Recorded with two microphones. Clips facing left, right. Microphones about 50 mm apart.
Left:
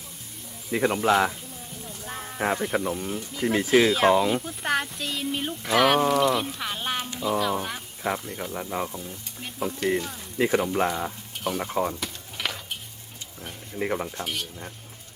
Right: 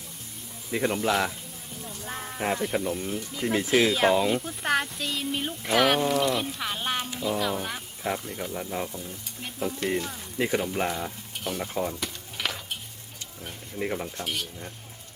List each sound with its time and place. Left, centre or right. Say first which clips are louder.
0.7 s speech: left 4 dB; centre
2.0 s speech: left 2 dB; centre
9.0 s frying: even; centre
10.8 s stir: left 3 dB; centre
11.6 s speech: left 3 dB; centre
11.9 s a sound: even; centre
13.4 s speech: left 2 dB; centre